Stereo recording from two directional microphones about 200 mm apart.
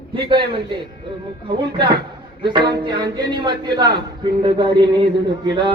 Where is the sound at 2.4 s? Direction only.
25° right (ahead or behind).